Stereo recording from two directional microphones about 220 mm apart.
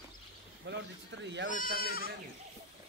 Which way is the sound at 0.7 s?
55° right (ahead or behind).